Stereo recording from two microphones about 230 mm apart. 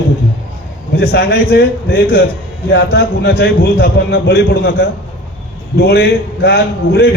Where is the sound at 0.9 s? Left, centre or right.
Left.